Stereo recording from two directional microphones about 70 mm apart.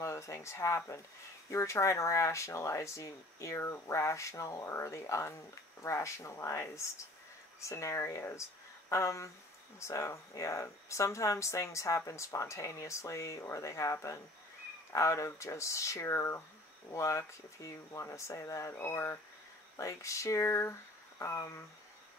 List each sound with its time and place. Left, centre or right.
0.0 s speech: left